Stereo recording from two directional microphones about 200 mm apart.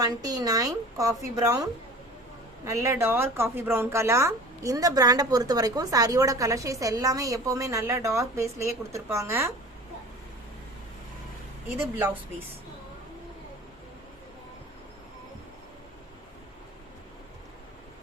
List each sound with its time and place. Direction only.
0.0 s speech: 20° right (ahead or behind)
2.6 s speech: 15° right (ahead or behind)